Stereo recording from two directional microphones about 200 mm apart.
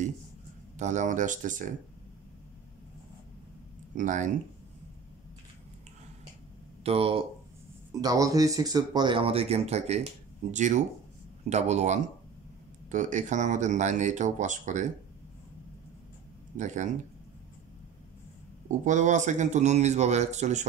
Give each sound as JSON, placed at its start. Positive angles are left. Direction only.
{"t": 0.7, "sound": "speech", "side_deg": -35}
{"t": 3.9, "sound": "speech", "side_deg": -40}
{"t": 6.8, "sound": "speech", "side_deg": -30}
{"t": 7.9, "sound": "speech", "side_deg": -20}
{"t": 16.5, "sound": "speech", "side_deg": -35}
{"t": 18.7, "sound": "speech", "side_deg": -40}